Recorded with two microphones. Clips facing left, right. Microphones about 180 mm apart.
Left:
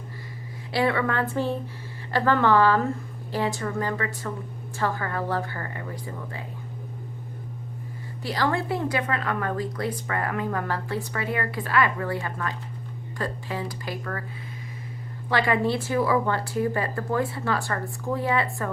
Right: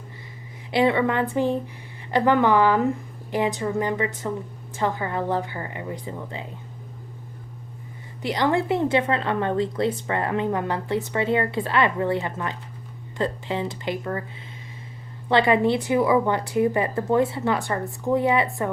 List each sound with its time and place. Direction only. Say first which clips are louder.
0.7 s a woman's voice: right 4 dB; 20° right (ahead or behind)
8.2 s a woman's voice: right 4 dB; 20° right (ahead or behind)
15.3 s a woman's voice: right 4 dB; 25° right (ahead or behind)